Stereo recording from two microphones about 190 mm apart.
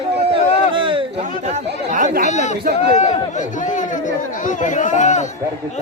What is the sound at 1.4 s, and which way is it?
Chatter, 35° right (ahead or behind).